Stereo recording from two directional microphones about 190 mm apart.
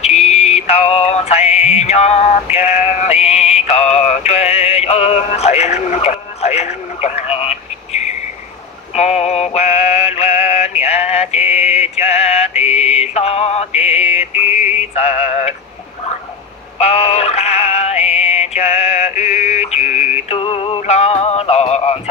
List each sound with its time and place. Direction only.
0.0 s music: 35° left (ahead or behind)
8.9 s synthetic singing: 35° left (ahead or behind)
16.7 s synthetic singing: 35° left (ahead or behind)
20.2 s music: 30° left (ahead or behind)